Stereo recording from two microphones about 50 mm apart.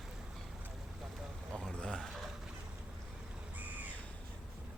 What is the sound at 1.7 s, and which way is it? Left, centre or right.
Speech, centre.